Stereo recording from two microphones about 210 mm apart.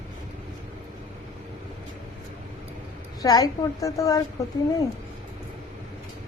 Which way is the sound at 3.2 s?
15° left (ahead or behind).